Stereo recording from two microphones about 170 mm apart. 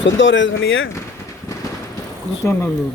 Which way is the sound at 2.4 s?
10° left (ahead or behind).